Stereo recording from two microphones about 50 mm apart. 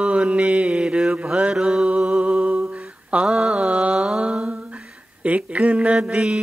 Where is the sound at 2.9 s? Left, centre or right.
Right.